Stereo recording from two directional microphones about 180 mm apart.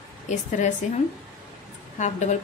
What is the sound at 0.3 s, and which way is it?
Speech, 40° left (ahead or behind).